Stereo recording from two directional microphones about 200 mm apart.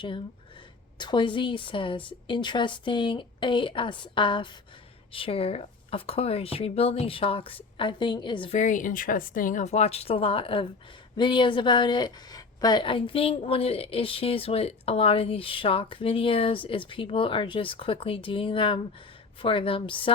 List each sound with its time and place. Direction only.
0.9 s a woman's voice: 25° left (ahead or behind)
8.5 s a woman's voice: 40° left (ahead or behind)